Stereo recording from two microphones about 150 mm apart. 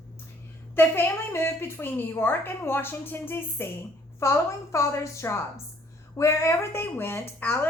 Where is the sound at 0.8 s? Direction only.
15° left (ahead or behind).